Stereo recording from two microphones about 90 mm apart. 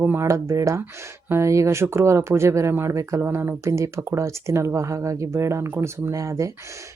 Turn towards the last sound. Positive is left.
turn(degrees=-35)  # may be behind; listen again after turning